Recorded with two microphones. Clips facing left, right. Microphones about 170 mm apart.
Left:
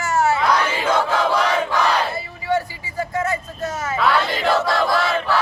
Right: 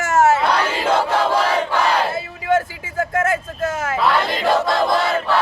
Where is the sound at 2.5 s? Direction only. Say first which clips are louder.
Right 3 dB; 50° right (ahead or behind).